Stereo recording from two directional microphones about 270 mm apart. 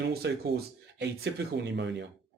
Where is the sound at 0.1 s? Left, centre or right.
Right.